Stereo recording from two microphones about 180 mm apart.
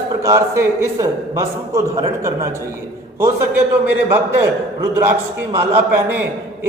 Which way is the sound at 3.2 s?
15° right (ahead or behind).